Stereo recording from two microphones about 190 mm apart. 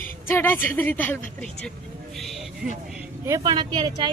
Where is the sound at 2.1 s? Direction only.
Centre (ahead or behind).